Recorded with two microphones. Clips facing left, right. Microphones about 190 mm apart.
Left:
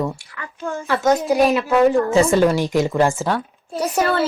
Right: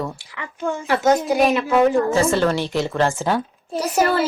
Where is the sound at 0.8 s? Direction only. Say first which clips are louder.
Even; 20° right (ahead or behind).